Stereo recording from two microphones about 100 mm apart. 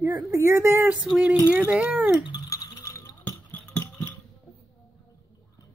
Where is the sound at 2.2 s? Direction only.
40° left (ahead or behind).